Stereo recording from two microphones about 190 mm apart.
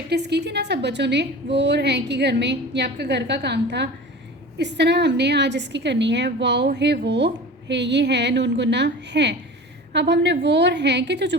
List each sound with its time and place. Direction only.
0.1 s a woman's voice: 60° right (ahead or behind)